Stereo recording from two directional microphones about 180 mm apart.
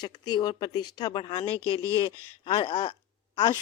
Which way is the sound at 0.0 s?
25° left (ahead or behind).